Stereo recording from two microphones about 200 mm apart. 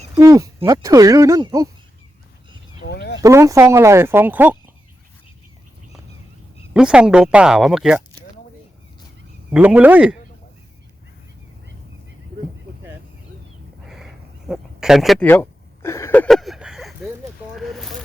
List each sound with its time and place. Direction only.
0.2 s speech: 15° right (ahead or behind)
2.8 s speech: 60° left (ahead or behind)
3.2 s speech: 15° right (ahead or behind)
6.7 s speech: 5° right (ahead or behind)
9.5 s speech: 5° right (ahead or behind)
13.8 s a sound: centre (ahead or behind)
15.3 s a sound: 10° left (ahead or behind)